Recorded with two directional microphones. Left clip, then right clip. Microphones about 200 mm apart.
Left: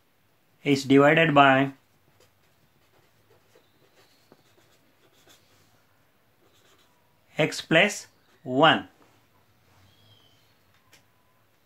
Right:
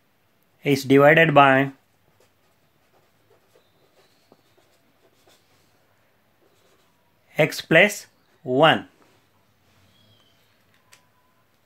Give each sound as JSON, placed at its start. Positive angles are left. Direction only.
{"t": 0.6, "sound": "speech", "side_deg": -30}
{"t": 7.2, "sound": "speech", "side_deg": -30}